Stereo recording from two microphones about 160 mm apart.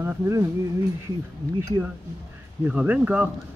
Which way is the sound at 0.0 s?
20° right (ahead or behind).